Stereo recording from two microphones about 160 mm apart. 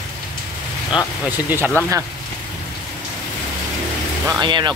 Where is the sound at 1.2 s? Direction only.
10° right (ahead or behind).